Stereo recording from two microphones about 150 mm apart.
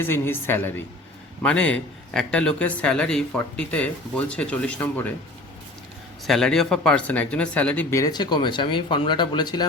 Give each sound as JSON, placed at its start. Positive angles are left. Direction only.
{"t": 0.0, "sound": "speech", "side_deg": 15}
{"t": 6.2, "sound": "speech", "side_deg": 5}